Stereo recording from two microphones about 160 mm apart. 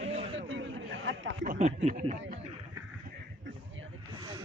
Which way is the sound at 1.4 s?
60° right (ahead or behind).